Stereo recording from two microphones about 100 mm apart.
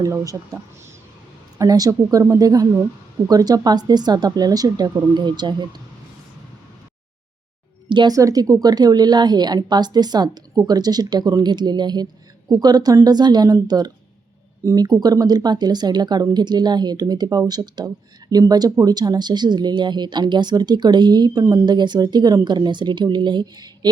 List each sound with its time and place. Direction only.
0.0 s a woman's voice: 35° right (ahead or behind)
1.5 s a woman's voice: 35° right (ahead or behind)
7.9 s speech: 50° right (ahead or behind)
8.1 s a woman's voice: 35° right (ahead or behind)